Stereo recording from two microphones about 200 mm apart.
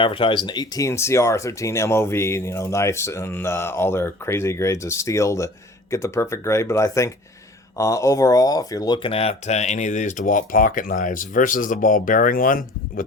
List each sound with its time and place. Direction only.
0.0 s speech: 25° left (ahead or behind); by 13.1 s 45° left (ahead or behind)